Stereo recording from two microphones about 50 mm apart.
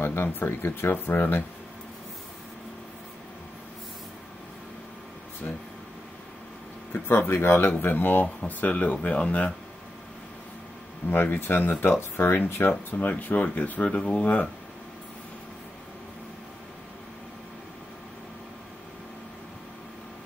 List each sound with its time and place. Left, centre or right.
0.0 s speech: left
6.9 s speech: left
11.1 s speech: left
12.9 s speech: left